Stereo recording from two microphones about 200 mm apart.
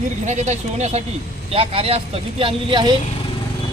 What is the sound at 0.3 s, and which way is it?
Speech, 35° right (ahead or behind).